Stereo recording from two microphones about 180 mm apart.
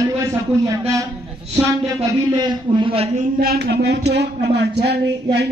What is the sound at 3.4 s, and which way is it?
A man's voice, 60° right (ahead or behind).